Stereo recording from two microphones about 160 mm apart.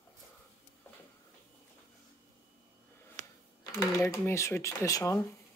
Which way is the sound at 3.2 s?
50° right (ahead or behind).